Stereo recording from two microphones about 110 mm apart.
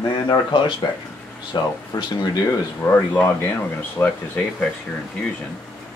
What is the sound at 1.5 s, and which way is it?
Speech, 35° left (ahead or behind).